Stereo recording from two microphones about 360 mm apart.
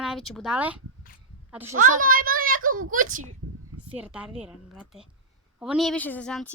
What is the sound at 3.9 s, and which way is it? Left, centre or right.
A woman's voice, centre.